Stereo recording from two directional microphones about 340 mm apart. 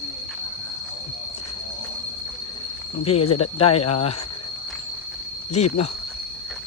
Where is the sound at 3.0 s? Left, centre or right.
Centre.